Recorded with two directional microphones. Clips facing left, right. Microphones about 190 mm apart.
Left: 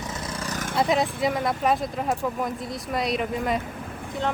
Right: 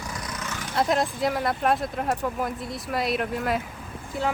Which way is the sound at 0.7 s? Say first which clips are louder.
Left 1 dB; centre (ahead or behind).